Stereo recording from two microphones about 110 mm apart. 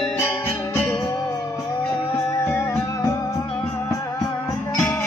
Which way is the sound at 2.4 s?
20° left (ahead or behind).